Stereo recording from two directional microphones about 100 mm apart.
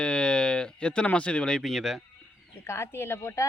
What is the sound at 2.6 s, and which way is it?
Speech, 25° left (ahead or behind).